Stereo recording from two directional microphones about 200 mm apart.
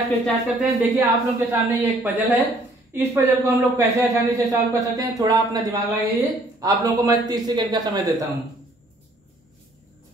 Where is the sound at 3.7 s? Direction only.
15° right (ahead or behind).